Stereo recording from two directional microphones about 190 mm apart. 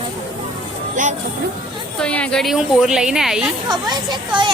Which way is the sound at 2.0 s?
5° left (ahead or behind).